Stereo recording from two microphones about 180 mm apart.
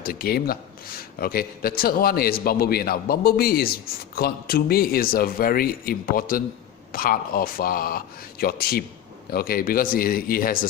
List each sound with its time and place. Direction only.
0.0 s a man's voice: 55° left (ahead or behind)